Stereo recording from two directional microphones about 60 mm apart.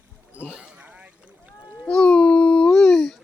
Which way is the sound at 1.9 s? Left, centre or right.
Centre.